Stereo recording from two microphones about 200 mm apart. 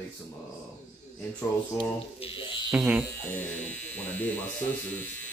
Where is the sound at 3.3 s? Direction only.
10° left (ahead or behind).